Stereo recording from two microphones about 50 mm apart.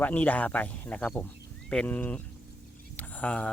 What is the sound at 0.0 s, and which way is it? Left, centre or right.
Speech, left.